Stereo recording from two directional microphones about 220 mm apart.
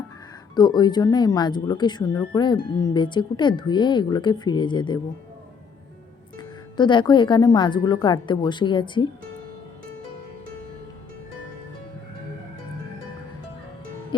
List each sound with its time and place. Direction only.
0.5 s a woman's voice: 20° left (ahead or behind)
6.3 s a woman's voice: 20° left (ahead or behind)